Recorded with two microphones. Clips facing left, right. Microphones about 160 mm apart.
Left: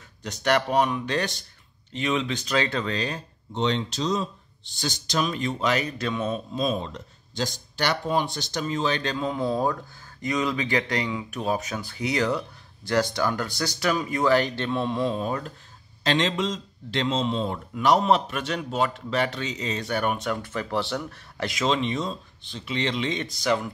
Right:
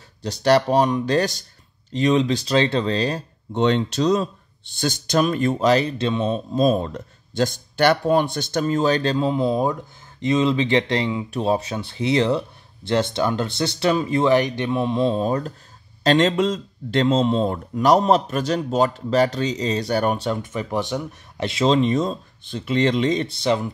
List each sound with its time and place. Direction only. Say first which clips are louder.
0.2 s a man's voice: right 6 dB; 35° right (ahead or behind)
3.5 s speech: right 6 dB; 60° right (ahead or behind)
5.7 s speech: right 7 dB; 30° right (ahead or behind)
6.5 s a man's voice: right 8 dB; 45° right (ahead or behind)
20.4 s a man's voice: right 3 dB; 20° right (ahead or behind)